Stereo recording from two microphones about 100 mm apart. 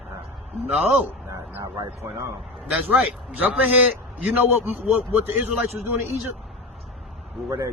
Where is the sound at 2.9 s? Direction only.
15° right (ahead or behind).